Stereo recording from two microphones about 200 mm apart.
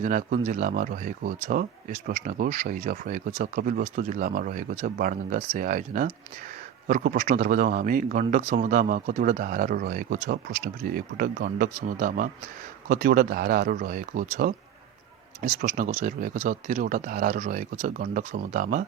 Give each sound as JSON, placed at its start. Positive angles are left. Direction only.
{"t": 0.0, "sound": "speech", "side_deg": -40}
{"t": 15.5, "sound": "speech", "side_deg": -45}